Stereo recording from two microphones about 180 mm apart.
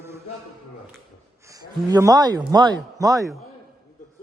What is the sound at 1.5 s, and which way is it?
Speech, 20° right (ahead or behind).